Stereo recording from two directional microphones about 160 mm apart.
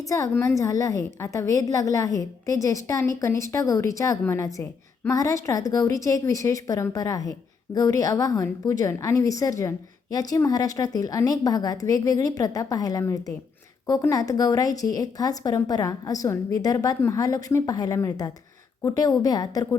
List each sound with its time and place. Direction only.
0.0 s a woman's voice: 20° left (ahead or behind)